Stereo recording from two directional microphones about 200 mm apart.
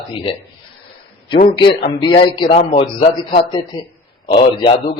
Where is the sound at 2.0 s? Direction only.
20° left (ahead or behind).